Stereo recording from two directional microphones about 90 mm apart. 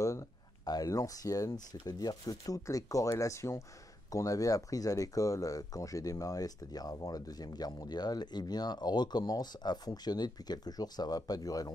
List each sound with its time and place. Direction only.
0.0 s speech: 35° left (ahead or behind)